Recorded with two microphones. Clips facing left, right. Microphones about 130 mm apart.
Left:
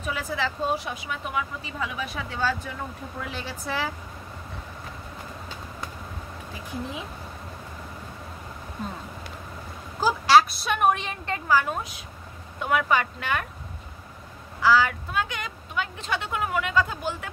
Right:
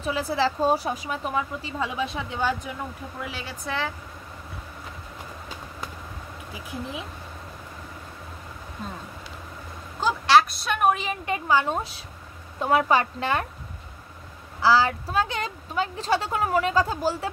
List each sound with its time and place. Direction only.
0.0 s a woman's voice: 35° right (ahead or behind); by 2.7 s 15° right (ahead or behind)
3.2 s speech: 5° right (ahead or behind)
9.9 s a woman's voice: 5° left (ahead or behind); by 13.5 s 30° right (ahead or behind)
14.6 s a woman's voice: 35° right (ahead or behind)